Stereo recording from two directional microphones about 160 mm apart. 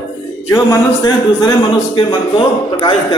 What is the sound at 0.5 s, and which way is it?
A man's voice, 25° left (ahead or behind).